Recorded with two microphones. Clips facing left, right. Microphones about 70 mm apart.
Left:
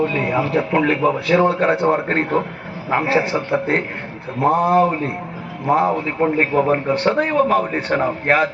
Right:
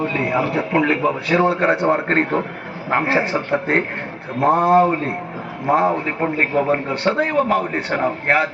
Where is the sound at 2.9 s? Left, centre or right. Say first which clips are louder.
Left 1 dB; right.